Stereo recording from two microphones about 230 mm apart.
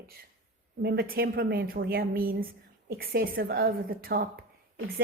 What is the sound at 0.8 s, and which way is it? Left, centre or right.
A woman's voice, right.